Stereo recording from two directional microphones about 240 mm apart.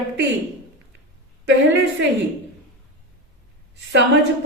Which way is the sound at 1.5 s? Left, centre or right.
Right.